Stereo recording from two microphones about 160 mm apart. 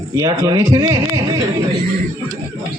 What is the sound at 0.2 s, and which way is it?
A man's voice, 25° right (ahead or behind).